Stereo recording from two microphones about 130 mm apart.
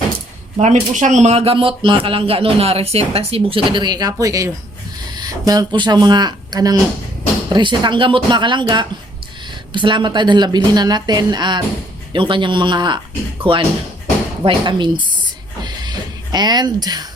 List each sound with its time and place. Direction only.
0.6 s speech: 70° right (ahead or behind); by 15.0 s 35° right (ahead or behind)
15.6 s music: 35° right (ahead or behind)